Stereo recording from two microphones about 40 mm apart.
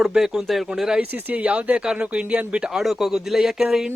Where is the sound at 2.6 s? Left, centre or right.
Centre.